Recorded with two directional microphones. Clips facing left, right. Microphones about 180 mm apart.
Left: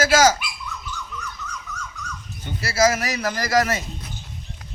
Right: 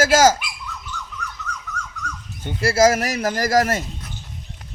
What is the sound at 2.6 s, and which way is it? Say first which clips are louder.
Speech: right 4 dB; 50° right (ahead or behind).